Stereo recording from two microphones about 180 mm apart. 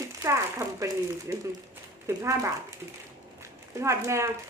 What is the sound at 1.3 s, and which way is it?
Speech, 15° right (ahead or behind).